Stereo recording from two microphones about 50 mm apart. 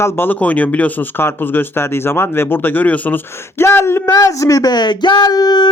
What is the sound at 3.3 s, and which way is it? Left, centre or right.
Speech, left.